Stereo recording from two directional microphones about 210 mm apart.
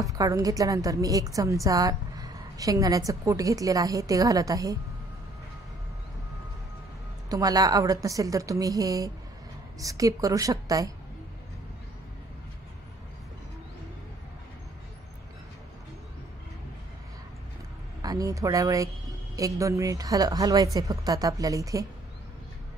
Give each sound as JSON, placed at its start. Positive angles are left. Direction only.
{"t": 0.1, "sound": "a woman's voice", "side_deg": -15}
{"t": 7.2, "sound": "a woman's voice", "side_deg": -15}
{"t": 18.0, "sound": "a woman's voice", "side_deg": -15}